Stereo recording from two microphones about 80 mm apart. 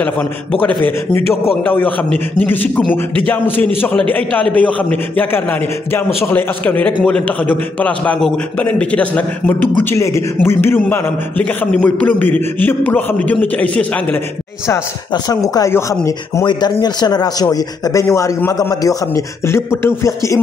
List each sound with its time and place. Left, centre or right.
1.7 s a man's voice: left
9.9 s a man's voice: left; by 13.8 s centre
15.2 s a man's voice: left
16.4 s a man's voice: left
18.0 s a man's voice: left
19.4 s speech: left